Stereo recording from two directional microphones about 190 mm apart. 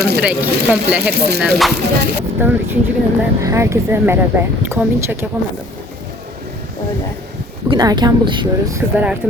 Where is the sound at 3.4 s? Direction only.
15° right (ahead or behind).